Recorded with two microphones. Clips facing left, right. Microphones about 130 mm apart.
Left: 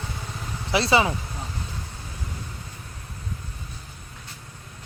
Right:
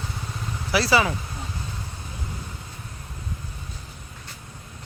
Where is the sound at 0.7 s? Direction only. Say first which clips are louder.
Even; 25° left (ahead or behind).